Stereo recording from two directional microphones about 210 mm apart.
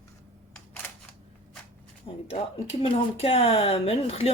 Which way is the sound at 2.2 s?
25° left (ahead or behind).